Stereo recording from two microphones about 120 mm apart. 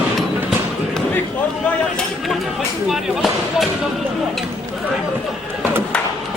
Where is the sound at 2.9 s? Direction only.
Centre (ahead or behind).